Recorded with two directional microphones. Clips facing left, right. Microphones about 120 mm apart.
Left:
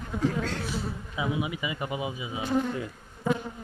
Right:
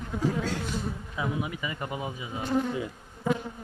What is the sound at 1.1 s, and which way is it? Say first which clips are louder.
Speech: left 2 dB; 10° left (ahead or behind).